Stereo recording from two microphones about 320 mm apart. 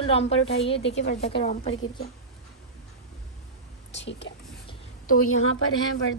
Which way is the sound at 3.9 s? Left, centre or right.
Left.